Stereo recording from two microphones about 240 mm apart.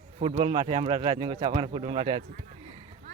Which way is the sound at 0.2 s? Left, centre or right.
Right.